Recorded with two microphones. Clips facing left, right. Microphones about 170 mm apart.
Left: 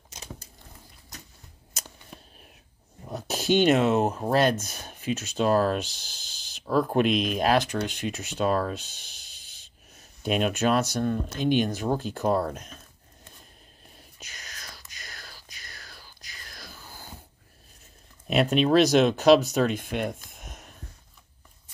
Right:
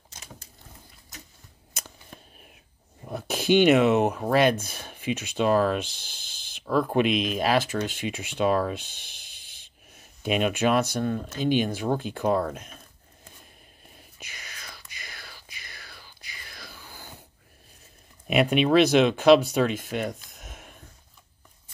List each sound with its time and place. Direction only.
2.1 s whispering: centre (ahead or behind)
3.3 s speech: 15° right (ahead or behind)
3.7 s speech: 35° left (ahead or behind)
4.2 s speech: 10° right (ahead or behind)
5.4 s speech: centre (ahead or behind)
5.9 s a sound: 55° right (ahead or behind)
6.6 s speech: 5° left (ahead or behind)
7.1 s speech: 45° left (ahead or behind)
7.3 s speech: 5° right (ahead or behind)
9.9 s speech: 5° right (ahead or behind)
12.1 s speech: 5° left (ahead or behind)
13.9 s whispering: 10° right (ahead or behind)
18.2 s speech: 10° right (ahead or behind)
20.2 s a sound: centre (ahead or behind)